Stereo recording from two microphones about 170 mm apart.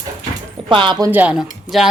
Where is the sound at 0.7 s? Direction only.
30° right (ahead or behind).